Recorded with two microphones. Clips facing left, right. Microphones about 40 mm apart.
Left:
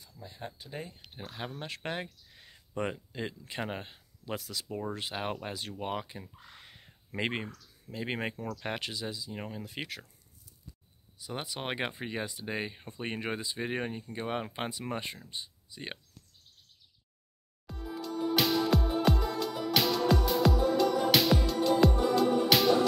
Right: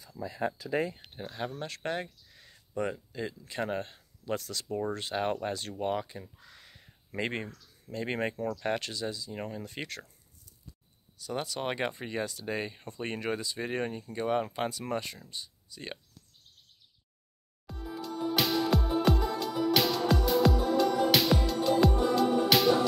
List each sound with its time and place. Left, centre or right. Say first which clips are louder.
1.1 s speech: right 4 dB; centre
11.1 s speech: right 4 dB; centre
17.6 s music: even; centre